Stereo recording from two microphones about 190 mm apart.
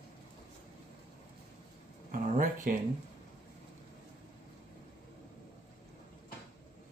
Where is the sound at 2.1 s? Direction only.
45° right (ahead or behind).